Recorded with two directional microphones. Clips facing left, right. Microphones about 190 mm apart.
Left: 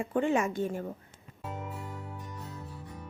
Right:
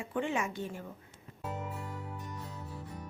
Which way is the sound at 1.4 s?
Centre (ahead or behind).